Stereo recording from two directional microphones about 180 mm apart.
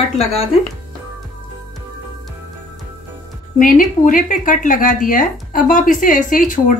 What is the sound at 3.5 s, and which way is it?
Speech, 45° left (ahead or behind).